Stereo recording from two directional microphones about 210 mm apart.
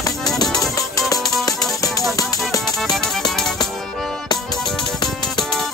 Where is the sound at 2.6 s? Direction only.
Centre (ahead or behind).